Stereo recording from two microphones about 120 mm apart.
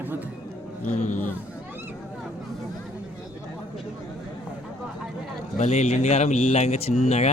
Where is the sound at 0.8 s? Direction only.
90° left.